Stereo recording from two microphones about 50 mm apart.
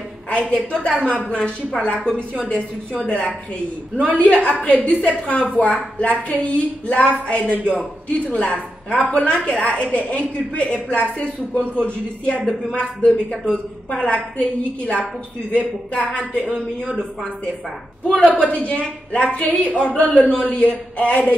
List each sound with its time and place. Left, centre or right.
0.3 s a woman's voice: left
12.7 s a man's voice: centre
16.1 s a man's voice: centre
18.0 s a man's voice: centre
18.5 s a woman's voice: left